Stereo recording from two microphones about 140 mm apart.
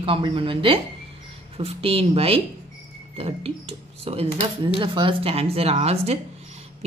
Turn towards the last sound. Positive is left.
turn(degrees=-50)  # may be behind; listen again after turning